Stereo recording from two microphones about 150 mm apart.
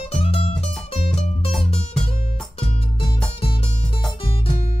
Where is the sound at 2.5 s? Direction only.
35° left (ahead or behind).